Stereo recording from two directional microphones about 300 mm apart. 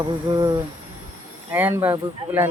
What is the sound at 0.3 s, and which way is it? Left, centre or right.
Speech, centre.